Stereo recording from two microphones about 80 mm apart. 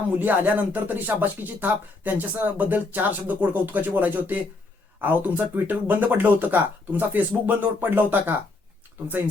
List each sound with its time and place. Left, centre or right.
0.2 s speech: right